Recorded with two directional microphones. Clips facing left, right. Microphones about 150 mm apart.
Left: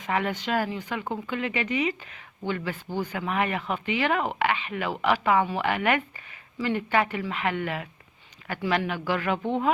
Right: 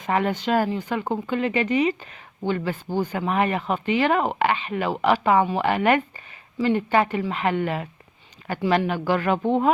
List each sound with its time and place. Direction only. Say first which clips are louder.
0.0 s speech: right 5 dB; 40° right (ahead or behind)